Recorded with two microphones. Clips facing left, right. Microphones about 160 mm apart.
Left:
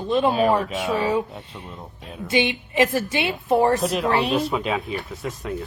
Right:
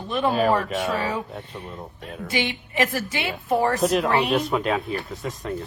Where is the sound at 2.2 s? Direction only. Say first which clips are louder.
Left 5 dB; 20° left (ahead or behind).